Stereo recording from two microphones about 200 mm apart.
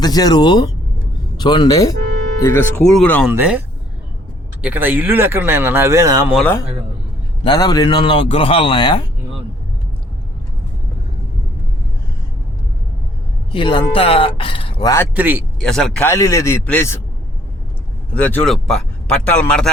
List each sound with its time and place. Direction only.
0.0 s a man's voice: 20° left (ahead or behind)
3.2 s speech: 5° right (ahead or behind)
4.6 s speech: 10° right (ahead or behind)
6.3 s a man's voice: 10° left (ahead or behind)
7.4 s a man's voice: 20° left (ahead or behind)
13.5 s a man's voice: 25° left (ahead or behind)
15.1 s speech: 10° right (ahead or behind)
15.6 s speech: 5° left (ahead or behind)
16.0 s a man's voice: 15° left (ahead or behind)
18.1 s a man's voice: 10° left (ahead or behind)